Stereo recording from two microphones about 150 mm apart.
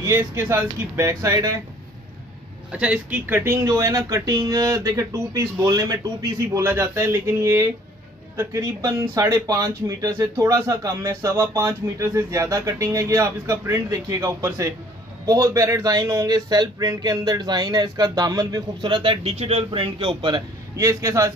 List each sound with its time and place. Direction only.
0.0 s speech: 20° right (ahead or behind)
2.7 s speech: 10° right (ahead or behind); by 20.4 s 30° right (ahead or behind)
20.7 s speech: 20° right (ahead or behind)